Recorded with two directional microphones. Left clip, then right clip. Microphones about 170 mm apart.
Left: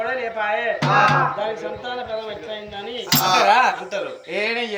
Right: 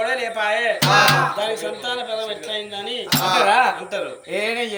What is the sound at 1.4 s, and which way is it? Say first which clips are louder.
Speech: right 2 dB; 10° right (ahead or behind).